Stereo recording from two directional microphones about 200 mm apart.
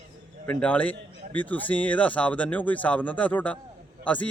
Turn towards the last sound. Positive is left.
turn(degrees=5)  # may be behind; listen again after turning